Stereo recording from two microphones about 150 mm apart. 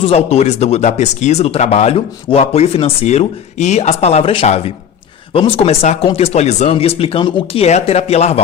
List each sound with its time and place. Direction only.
0.0 s speech: 45° left (ahead or behind)